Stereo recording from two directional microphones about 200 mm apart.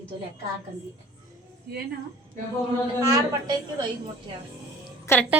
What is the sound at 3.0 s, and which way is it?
Speech, 15° right (ahead or behind).